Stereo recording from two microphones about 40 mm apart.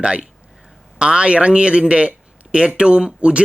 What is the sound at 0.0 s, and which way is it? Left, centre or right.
A man's voice, right.